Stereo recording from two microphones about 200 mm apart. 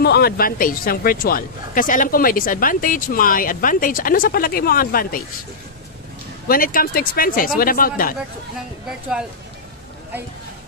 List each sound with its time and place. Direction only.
0.0 s speech: 55° left (ahead or behind)
6.4 s speech: 45° left (ahead or behind)